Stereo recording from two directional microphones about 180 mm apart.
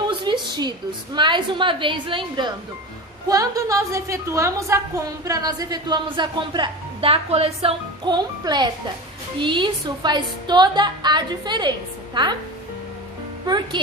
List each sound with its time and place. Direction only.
0.1 s a woman's voice: 25° right (ahead or behind)
13.5 s a woman's voice: 20° right (ahead or behind)